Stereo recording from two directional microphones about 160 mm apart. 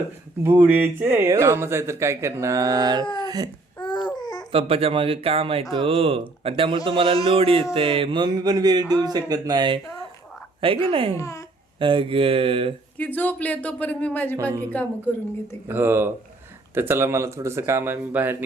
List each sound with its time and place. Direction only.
0.4 s speech: 15° right (ahead or behind)
3.2 s baby cry: 25° right (ahead or behind)
3.8 s babbling: 30° left (ahead or behind)
4.5 s speech: 35° right (ahead or behind)
11.2 s speech: 20° left (ahead or behind)
11.8 s speech: 30° right (ahead or behind)
13.0 s speech: 10° left (ahead or behind)
14.3 s speech: 20° right (ahead or behind)
15.6 s speech: 15° right (ahead or behind)